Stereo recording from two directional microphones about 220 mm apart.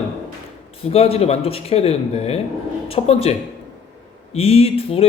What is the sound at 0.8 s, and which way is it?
A man's voice, 25° left (ahead or behind).